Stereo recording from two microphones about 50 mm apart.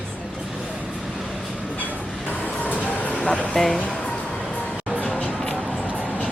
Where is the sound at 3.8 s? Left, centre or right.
Left.